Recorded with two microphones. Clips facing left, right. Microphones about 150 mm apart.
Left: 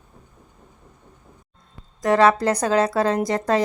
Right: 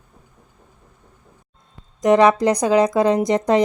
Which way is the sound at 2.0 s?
20° right (ahead or behind).